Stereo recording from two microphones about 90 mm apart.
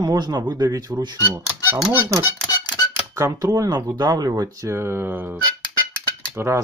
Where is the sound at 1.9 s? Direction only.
25° right (ahead or behind).